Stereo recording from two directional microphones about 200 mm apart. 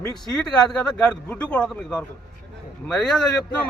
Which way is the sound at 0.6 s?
5° left (ahead or behind).